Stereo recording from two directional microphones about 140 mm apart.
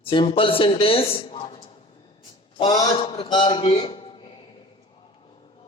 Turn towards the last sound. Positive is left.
turn(degrees=35)  # may be behind; listen again after turning